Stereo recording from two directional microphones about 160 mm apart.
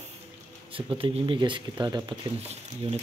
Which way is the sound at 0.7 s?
35° right (ahead or behind).